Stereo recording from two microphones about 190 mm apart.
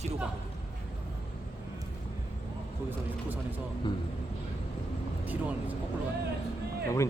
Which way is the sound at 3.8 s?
25° left (ahead or behind).